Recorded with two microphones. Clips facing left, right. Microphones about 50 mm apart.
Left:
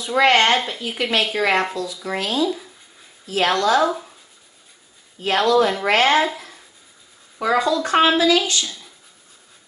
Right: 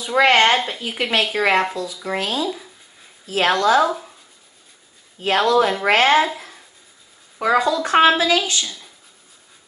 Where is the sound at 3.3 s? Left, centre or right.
Centre.